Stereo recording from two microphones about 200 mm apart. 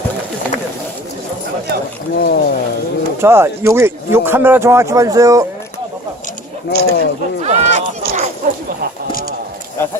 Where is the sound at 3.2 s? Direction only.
10° right (ahead or behind).